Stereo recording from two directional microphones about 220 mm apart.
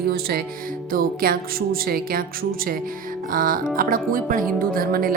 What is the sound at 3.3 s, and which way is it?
Speech, 40° right (ahead or behind).